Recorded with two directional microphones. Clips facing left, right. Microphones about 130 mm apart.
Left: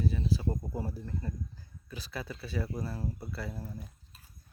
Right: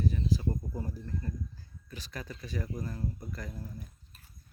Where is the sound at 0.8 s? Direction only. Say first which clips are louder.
Left 2 dB; 35° left (ahead or behind).